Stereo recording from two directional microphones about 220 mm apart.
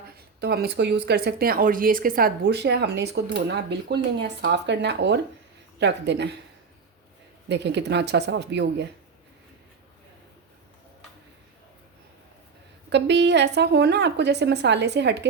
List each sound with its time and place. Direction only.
0.3 s speech: 45° right (ahead or behind)
7.4 s speech: 50° right (ahead or behind)
12.9 s speech: 50° right (ahead or behind)